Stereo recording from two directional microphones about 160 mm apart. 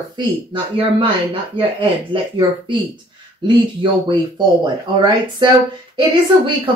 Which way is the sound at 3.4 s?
30° right (ahead or behind).